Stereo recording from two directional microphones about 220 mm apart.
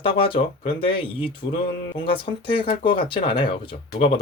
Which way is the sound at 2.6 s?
25° left (ahead or behind).